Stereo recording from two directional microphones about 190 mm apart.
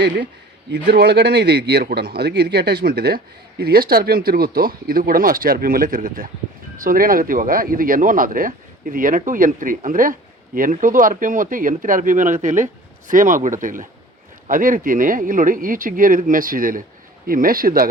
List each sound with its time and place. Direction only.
0.7 s a man's voice: 60° right (ahead or behind)